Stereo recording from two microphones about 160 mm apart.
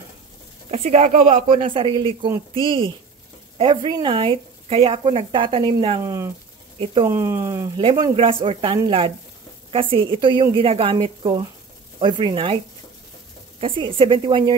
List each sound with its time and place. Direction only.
0.7 s speech: 45° right (ahead or behind)
1.7 s speech: 30° right (ahead or behind)
6.0 s speech: 20° right (ahead or behind)
6.8 s speech: 35° right (ahead or behind)
7.1 s speech: 20° right (ahead or behind)
13.6 s speech: 35° right (ahead or behind)